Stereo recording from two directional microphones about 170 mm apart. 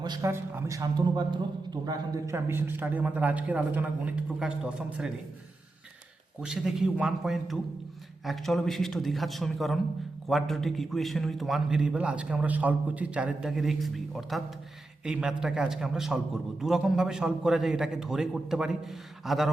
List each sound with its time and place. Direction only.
0.0 s a man's voice: 20° right (ahead or behind)
6.4 s a man's voice: 5° right (ahead or behind)